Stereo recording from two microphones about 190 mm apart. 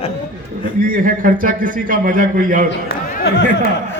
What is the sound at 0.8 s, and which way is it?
A man's voice, 45° right (ahead or behind).